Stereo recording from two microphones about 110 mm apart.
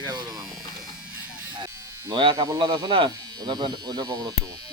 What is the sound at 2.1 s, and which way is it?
Speech, 45° right (ahead or behind).